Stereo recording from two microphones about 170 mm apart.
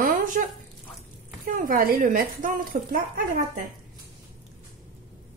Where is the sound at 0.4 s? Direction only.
55° right (ahead or behind).